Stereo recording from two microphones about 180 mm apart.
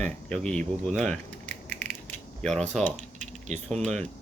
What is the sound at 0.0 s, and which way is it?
Speech, 5° left (ahead or behind).